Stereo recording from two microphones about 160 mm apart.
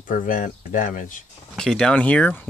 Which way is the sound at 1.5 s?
5° left (ahead or behind).